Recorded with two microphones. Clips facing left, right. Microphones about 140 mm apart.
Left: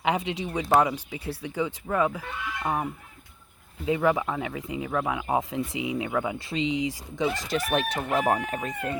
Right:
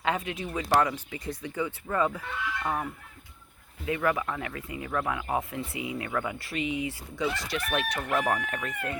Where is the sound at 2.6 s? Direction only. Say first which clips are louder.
Left 6 dB; 20° left (ahead or behind).